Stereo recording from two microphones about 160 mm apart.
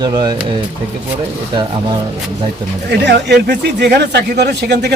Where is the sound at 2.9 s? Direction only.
90° right.